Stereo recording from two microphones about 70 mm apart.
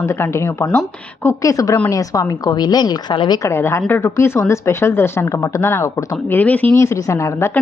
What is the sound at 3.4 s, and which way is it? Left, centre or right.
A woman's voice, left.